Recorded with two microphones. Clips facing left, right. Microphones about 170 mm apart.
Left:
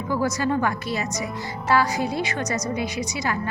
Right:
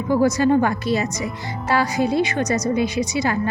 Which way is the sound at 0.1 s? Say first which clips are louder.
Right 7 dB; 25° right (ahead or behind).